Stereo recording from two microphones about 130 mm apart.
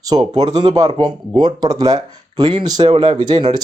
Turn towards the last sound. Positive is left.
turn(degrees=-40)  # may be behind; listen again after turning